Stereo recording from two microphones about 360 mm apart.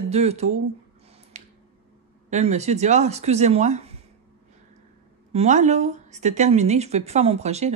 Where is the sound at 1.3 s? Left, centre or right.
Centre.